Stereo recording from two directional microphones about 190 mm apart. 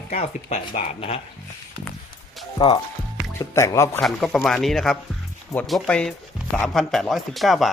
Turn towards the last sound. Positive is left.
turn(degrees=0)  # may be behind; listen again after turning